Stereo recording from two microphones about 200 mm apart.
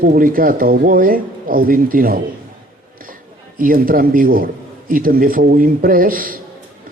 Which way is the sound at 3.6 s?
45° right (ahead or behind).